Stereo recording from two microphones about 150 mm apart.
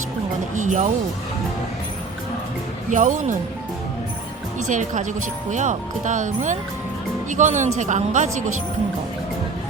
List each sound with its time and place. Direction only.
0.5 s speech: 55° right (ahead or behind)
2.9 s speech: 55° right (ahead or behind)
4.7 s a woman's voice: 55° right (ahead or behind)